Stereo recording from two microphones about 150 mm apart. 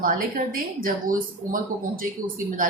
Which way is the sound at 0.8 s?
65° right (ahead or behind).